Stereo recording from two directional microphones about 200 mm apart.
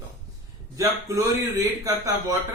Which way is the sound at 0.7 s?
15° right (ahead or behind).